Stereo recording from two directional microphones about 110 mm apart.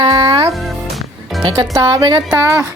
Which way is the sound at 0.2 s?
50° right (ahead or behind).